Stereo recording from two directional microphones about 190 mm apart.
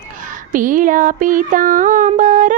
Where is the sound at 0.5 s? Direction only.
45° right (ahead or behind).